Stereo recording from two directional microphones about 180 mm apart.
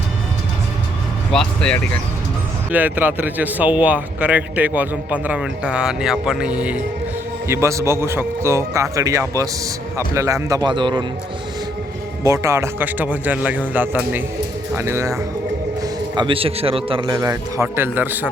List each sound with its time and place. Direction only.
1.3 s speech: 5° left (ahead or behind)
2.7 s a man's voice: 10° right (ahead or behind); by 11.0 s 25° right (ahead or behind)
12.2 s speech: 15° right (ahead or behind)
15.8 s a man's voice: 25° right (ahead or behind); by 18.3 s 10° right (ahead or behind)